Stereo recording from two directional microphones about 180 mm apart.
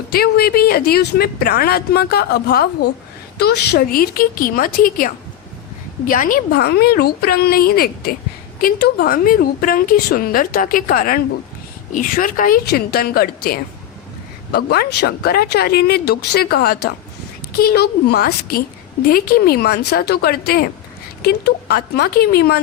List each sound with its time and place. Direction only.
0.1 s a woman's voice: 60° left (ahead or behind)